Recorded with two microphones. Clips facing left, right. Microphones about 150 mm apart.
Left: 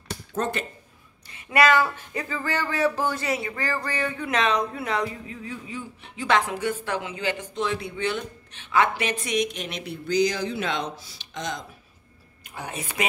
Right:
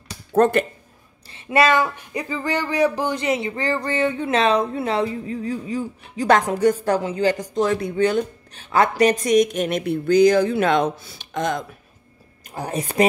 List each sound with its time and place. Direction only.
0.3 s speech: 60° right (ahead or behind)
1.3 s speech: 25° right (ahead or behind); by 11.6 s 55° right (ahead or behind)
12.4 s speech: 40° right (ahead or behind)